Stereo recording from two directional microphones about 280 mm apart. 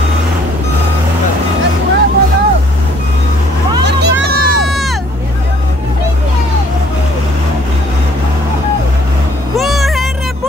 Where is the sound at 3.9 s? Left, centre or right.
Right.